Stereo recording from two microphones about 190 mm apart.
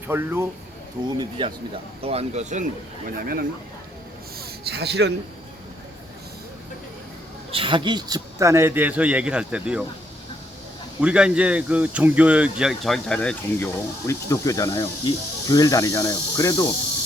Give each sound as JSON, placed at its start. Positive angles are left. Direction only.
{"t": 0.1, "sound": "a man's voice", "side_deg": -10}
{"t": 1.0, "sound": "speech", "side_deg": -25}
{"t": 3.2, "sound": "speech", "side_deg": -50}
{"t": 4.4, "sound": "a sound", "side_deg": -60}
{"t": 7.5, "sound": "a man's voice", "side_deg": -25}
{"t": 11.0, "sound": "speech", "side_deg": -5}